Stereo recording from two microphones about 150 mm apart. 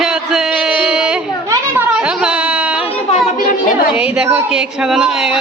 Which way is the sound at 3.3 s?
65° left (ahead or behind).